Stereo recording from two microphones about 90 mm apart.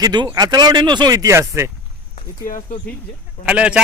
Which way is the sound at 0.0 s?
50° right (ahead or behind).